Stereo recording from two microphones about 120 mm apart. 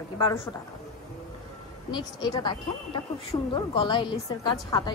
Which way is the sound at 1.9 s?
35° left (ahead or behind).